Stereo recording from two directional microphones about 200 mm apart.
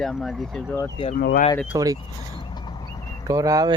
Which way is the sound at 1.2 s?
50° left (ahead or behind).